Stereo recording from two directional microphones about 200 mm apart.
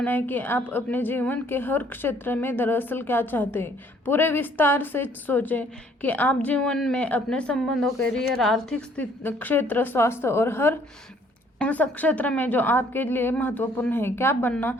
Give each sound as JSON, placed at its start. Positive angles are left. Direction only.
{"t": 0.0, "sound": "a woman's voice", "side_deg": 10}